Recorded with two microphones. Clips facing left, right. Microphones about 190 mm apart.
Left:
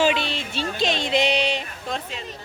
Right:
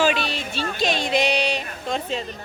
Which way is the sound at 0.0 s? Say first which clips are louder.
Even; 25° left (ahead or behind).